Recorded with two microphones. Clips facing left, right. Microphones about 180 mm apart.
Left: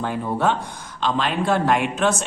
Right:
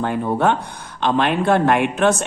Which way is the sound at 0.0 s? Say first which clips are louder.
Right 3 dB; 55° right (ahead or behind).